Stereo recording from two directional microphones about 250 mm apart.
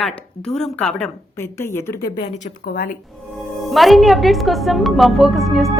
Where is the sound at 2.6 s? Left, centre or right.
Left.